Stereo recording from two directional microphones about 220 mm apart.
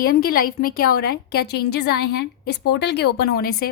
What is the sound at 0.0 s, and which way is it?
A woman's voice, 40° left (ahead or behind).